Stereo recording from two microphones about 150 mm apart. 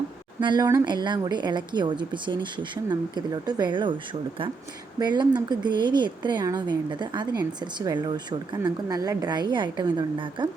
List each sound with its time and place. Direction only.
0.3 s a woman's voice: 30° right (ahead or behind)